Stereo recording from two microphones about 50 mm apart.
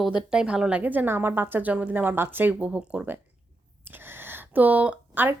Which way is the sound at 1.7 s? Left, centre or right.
Right.